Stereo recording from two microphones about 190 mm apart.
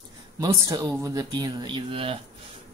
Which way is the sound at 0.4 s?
20° right (ahead or behind).